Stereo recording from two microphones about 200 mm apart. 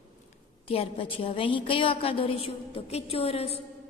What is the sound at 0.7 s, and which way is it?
A woman's voice, 25° left (ahead or behind).